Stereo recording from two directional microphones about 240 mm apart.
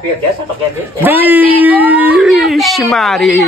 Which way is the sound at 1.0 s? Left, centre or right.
Centre.